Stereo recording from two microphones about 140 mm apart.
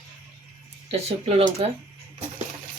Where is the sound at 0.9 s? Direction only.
45° right (ahead or behind).